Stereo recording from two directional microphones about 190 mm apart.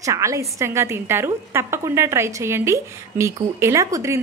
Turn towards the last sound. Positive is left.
turn(degrees=-15)  # may be behind; listen again after turning